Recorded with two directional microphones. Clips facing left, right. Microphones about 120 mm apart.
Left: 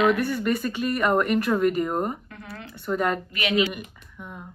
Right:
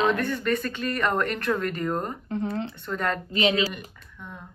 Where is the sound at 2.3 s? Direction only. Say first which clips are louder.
Right 12 dB; 25° right (ahead or behind).